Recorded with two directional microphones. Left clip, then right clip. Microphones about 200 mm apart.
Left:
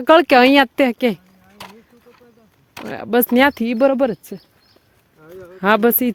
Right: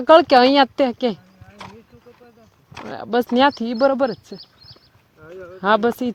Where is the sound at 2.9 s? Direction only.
50° left (ahead or behind).